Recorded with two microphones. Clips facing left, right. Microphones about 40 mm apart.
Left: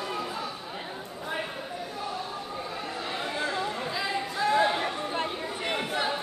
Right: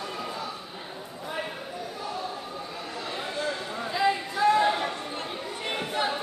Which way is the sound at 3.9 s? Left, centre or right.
Centre.